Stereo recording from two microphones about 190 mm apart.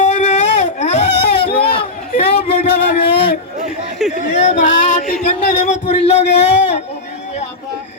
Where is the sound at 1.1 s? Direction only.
60° left (ahead or behind).